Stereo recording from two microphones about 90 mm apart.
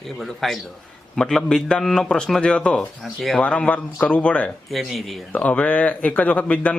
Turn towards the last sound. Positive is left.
turn(degrees=15)  # may be behind; listen again after turning